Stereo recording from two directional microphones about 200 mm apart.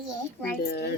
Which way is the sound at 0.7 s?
55° left (ahead or behind).